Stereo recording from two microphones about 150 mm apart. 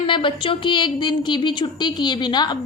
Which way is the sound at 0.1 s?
35° left (ahead or behind).